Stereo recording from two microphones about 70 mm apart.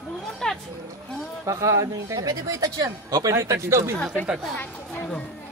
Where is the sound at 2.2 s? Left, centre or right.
Right.